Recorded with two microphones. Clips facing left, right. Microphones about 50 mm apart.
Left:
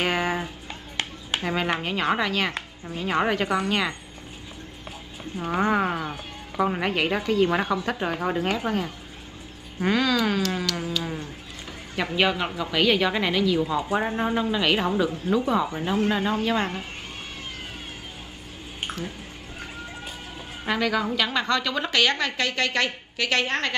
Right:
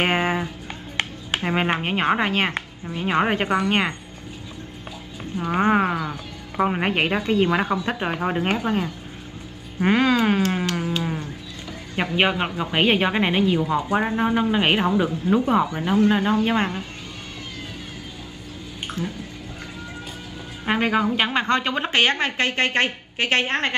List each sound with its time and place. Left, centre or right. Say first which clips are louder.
0.0 s music: right 3 dB; right
0.9 s a woman's voice: right 3 dB; right
5.5 s a woman's voice: right 3 dB; right
15.7 s a woman's voice: right 5 dB; right
18.9 s squish: right 5 dB; left
20.6 s a woman's voice: right 4 dB; right